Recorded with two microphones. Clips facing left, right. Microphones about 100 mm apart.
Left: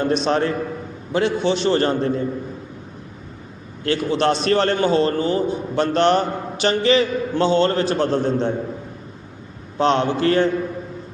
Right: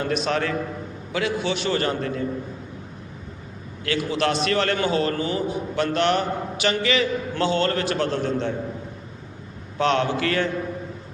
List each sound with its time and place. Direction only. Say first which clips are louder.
0.3 s a man's voice: left 4 dB; 30° left (ahead or behind)
3.8 s a man's voice: left 4 dB; 30° left (ahead or behind)
9.7 s a man's voice: left 3 dB; 30° left (ahead or behind)